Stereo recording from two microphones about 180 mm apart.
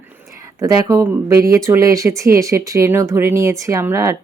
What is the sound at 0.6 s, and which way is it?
Speech, 20° right (ahead or behind).